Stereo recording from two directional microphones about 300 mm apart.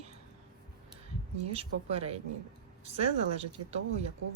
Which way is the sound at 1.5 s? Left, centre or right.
Centre.